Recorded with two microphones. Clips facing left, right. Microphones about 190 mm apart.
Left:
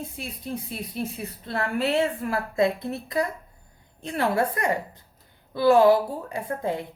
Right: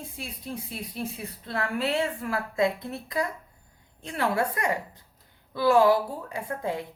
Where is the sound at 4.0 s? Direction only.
25° left (ahead or behind).